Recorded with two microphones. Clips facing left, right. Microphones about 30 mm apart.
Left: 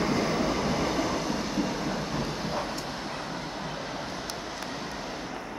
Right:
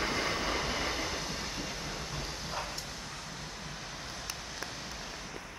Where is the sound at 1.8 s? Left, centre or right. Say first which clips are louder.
Left 8 dB; left.